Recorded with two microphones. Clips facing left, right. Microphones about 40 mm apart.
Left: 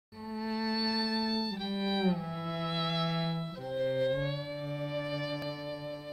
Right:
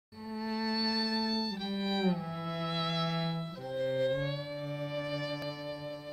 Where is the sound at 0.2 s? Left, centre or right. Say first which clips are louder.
Left 1 dB; centre.